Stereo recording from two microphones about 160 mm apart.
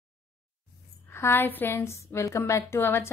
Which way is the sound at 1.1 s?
15° left (ahead or behind).